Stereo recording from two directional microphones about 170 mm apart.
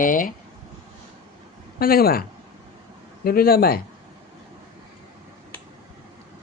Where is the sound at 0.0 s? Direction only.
55° left (ahead or behind).